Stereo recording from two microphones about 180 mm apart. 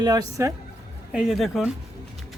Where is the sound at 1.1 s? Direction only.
5° right (ahead or behind).